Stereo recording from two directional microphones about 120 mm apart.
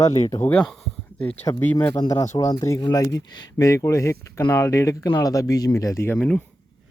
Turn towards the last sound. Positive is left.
turn(degrees=10)  # may be behind; listen again after turning